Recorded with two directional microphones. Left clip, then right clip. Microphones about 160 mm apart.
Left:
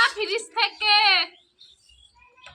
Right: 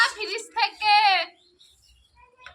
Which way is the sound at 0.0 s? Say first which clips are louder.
Left 2 dB; 20° right (ahead or behind).